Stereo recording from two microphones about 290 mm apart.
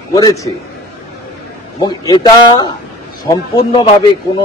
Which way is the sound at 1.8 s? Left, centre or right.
Centre.